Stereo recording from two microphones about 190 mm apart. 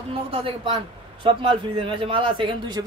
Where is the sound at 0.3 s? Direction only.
30° right (ahead or behind).